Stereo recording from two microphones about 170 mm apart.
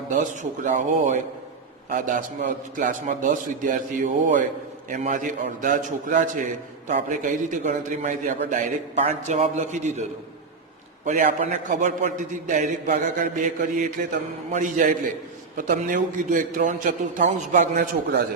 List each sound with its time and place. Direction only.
0.1 s a man's voice: 45° right (ahead or behind)